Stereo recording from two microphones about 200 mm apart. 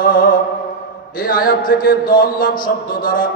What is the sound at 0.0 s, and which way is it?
Music, 45° left (ahead or behind).